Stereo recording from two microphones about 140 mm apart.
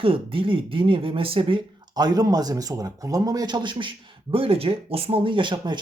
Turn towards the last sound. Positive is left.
turn(degrees=-35)  # may be behind; listen again after turning